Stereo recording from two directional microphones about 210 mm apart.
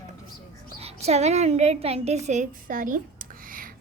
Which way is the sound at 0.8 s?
30° right (ahead or behind).